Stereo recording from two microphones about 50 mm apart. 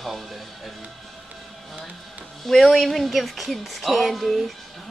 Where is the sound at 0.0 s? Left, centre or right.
Centre.